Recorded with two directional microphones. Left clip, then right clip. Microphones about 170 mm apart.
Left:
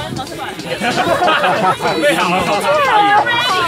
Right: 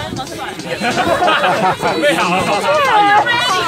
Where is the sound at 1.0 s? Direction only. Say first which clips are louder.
Even; 35° right (ahead or behind).